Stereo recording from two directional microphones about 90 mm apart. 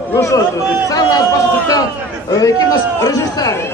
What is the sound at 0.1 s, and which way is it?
Speech, 35° left (ahead or behind).